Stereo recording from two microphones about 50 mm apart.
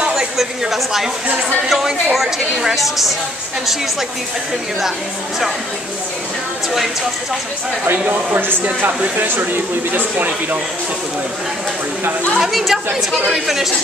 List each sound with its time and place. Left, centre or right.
0.1 s a sound: centre
1.7 s a woman's voice: centre
8.6 s speech: right
12.4 s a woman's voice: centre